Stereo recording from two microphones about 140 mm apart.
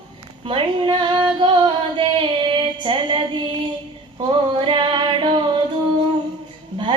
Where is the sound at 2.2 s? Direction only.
35° right (ahead or behind).